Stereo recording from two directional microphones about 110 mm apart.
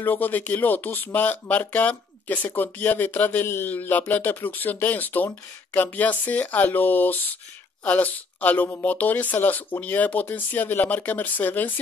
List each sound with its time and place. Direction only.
0.0 s speech: 15° left (ahead or behind)